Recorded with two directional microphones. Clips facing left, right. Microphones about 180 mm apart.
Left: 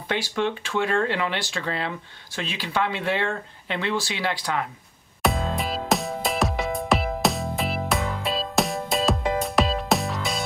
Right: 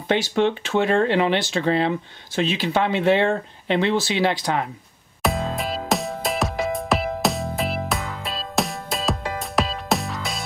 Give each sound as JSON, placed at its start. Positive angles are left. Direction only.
{"t": 0.4, "sound": "speech", "side_deg": -25}
{"t": 5.2, "sound": "music", "side_deg": 0}